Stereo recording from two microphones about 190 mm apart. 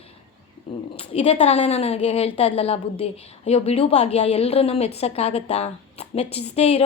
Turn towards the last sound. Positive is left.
turn(degrees=30)  # may be behind; listen again after turning